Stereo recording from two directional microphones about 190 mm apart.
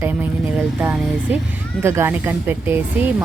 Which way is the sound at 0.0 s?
10° right (ahead or behind).